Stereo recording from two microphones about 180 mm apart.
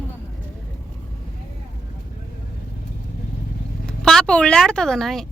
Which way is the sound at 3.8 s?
Centre (ahead or behind).